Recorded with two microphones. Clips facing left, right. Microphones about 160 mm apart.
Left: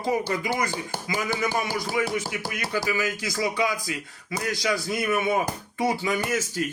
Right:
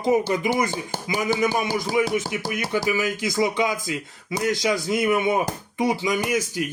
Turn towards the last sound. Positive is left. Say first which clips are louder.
# right 3 dB
turn(degrees=-15)  # may be behind; listen again after turning